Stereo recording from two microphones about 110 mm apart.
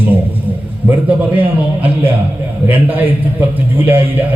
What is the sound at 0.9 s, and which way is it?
A man's voice, 15° right (ahead or behind).